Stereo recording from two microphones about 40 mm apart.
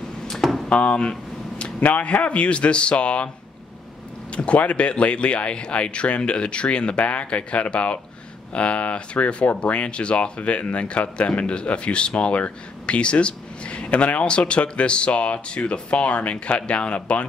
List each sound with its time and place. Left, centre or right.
0.4 s a sound: centre
0.7 s speech: left
4.3 s speech: left